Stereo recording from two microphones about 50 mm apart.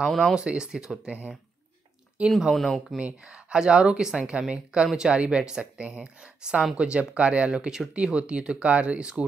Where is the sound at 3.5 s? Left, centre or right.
Centre.